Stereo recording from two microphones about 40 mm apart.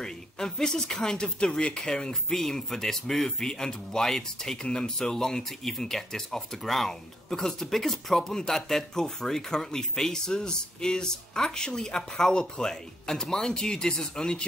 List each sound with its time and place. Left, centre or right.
0.0 s speech: centre
2.2 s speech: centre